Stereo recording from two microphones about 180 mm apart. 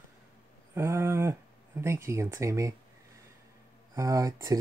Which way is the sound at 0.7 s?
15° right (ahead or behind).